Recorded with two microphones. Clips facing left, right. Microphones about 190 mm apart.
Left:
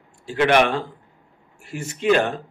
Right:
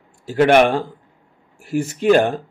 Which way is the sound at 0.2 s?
40° right (ahead or behind).